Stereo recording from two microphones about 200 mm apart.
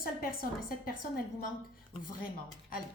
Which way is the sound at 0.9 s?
45° left (ahead or behind).